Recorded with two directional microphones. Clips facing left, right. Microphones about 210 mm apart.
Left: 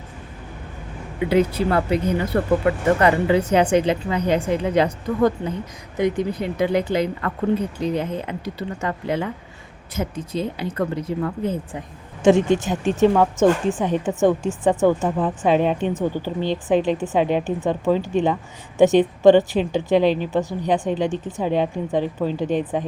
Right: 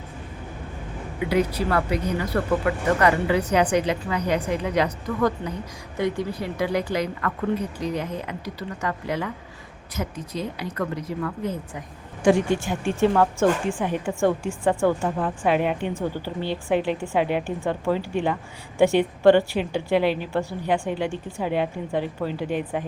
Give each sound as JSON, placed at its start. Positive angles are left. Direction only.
{"t": 1.3, "sound": "a woman's voice", "side_deg": 25}
{"t": 15.4, "sound": "speech", "side_deg": 25}